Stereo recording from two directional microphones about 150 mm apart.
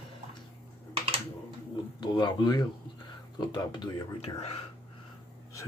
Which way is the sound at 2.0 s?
30° left (ahead or behind).